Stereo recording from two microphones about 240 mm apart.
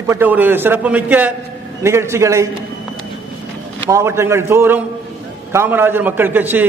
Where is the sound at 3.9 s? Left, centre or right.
Centre.